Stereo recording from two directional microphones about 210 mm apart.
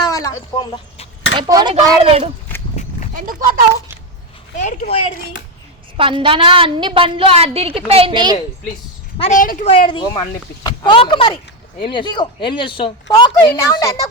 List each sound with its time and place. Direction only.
0.0 s speech: 15° left (ahead or behind)
1.4 s a woman's voice: 20° right (ahead or behind)
3.2 s speech: 40° right (ahead or behind)
4.5 s speech: 35° left (ahead or behind)
6.0 s a woman's voice: 25° right (ahead or behind)
9.1 s a woman's voice: 30° left (ahead or behind)
9.4 s speech: 40° left (ahead or behind)
9.7 s a woman's voice: 20° left (ahead or behind)